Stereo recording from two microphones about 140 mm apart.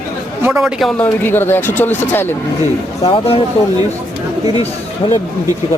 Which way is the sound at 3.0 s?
40° left (ahead or behind).